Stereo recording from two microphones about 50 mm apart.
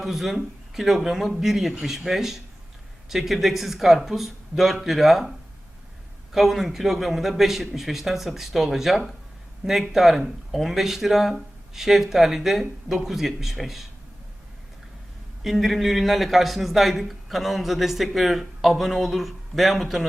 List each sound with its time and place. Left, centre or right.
0.0 s speech: centre
6.3 s speech: centre
15.4 s speech: centre